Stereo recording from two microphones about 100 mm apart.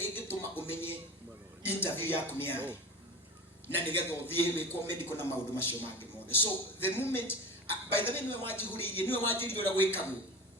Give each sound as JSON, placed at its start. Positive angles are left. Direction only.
{"t": 0.0, "sound": "music", "side_deg": 20}
{"t": 0.7, "sound": "a sound", "side_deg": 20}
{"t": 1.6, "sound": "speech", "side_deg": 20}
{"t": 3.8, "sound": "a man's voice", "side_deg": 20}